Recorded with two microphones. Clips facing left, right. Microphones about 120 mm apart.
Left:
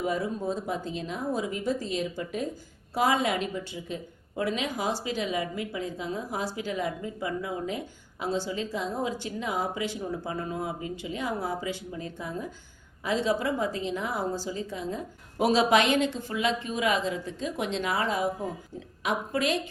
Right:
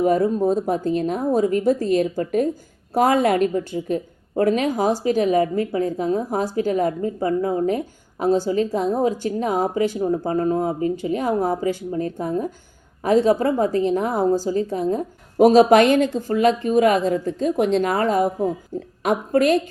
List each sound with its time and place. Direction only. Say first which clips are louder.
0.0 s a woman's voice: right 11 dB; 50° right (ahead or behind)